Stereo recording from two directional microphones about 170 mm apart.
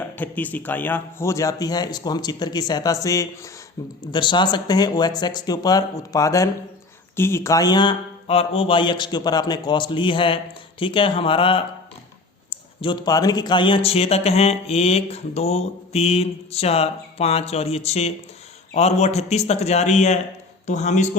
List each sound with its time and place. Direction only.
0.2 s a man's voice: 10° left (ahead or behind); by 21.1 s 45° left (ahead or behind)